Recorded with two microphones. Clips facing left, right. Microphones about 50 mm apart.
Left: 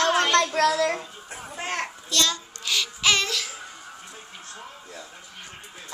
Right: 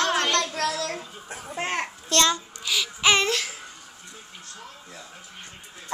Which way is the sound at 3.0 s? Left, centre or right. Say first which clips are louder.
Right 3 dB; right.